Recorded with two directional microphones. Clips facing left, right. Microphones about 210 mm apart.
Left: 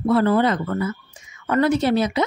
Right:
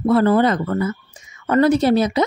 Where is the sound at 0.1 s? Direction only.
40° right (ahead or behind).